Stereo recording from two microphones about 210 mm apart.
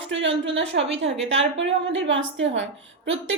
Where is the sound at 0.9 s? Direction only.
30° right (ahead or behind).